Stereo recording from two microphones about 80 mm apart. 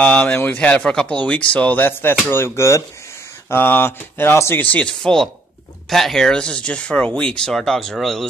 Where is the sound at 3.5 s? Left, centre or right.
Left.